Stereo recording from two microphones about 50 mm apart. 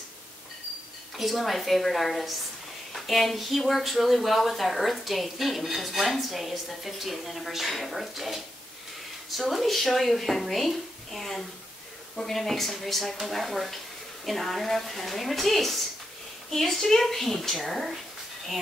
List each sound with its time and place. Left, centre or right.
1.1 s speech: centre
9.4 s speech: centre